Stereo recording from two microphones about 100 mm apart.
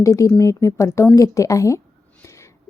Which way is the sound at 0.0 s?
30° left (ahead or behind).